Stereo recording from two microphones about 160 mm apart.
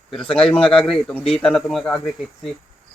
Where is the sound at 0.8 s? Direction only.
35° left (ahead or behind).